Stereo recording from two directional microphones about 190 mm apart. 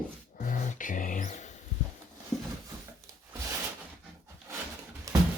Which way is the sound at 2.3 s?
20° left (ahead or behind).